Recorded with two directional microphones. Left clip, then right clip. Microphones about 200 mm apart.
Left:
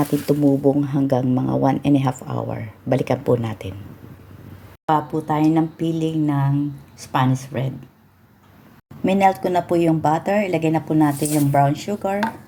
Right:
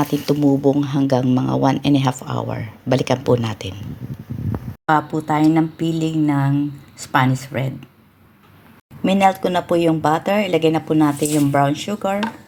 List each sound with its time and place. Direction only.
0.0 s speech: 5° left (ahead or behind)
4.9 s speech: 10° right (ahead or behind)
9.0 s speech: 10° right (ahead or behind)